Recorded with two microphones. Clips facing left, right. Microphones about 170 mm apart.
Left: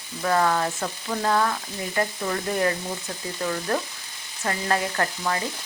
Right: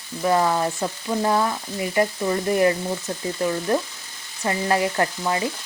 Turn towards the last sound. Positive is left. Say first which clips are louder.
# right 3 dB
turn(degrees=-15)  # may be behind; listen again after turning